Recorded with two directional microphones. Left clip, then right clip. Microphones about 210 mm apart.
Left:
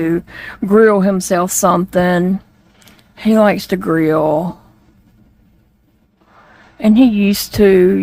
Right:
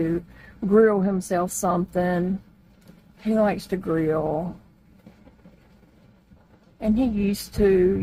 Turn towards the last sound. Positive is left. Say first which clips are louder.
# left 9 dB
turn(degrees=50)  # may be behind; listen again after turning